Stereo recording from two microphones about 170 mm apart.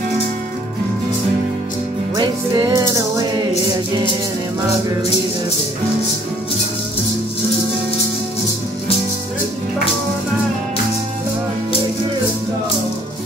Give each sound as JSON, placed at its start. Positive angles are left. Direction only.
{"t": 2.7, "sound": "music", "side_deg": -20}